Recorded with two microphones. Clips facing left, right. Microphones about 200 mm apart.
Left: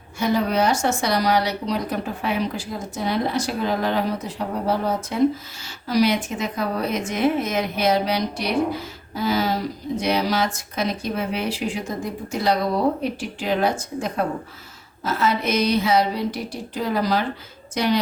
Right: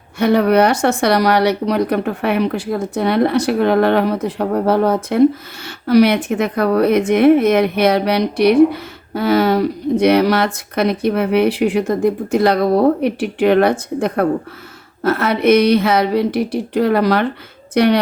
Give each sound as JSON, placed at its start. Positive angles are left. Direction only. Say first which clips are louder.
{"t": 0.2, "sound": "speech", "louder": "right 8 dB", "side_deg": -65}